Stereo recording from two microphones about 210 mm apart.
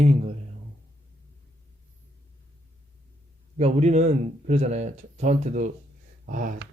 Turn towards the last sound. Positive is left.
turn(degrees=-40)  # may be behind; listen again after turning